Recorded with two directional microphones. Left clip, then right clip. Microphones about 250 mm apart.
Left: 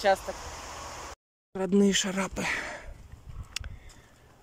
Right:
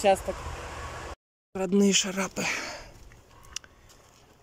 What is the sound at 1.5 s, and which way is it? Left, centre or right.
Speech, centre.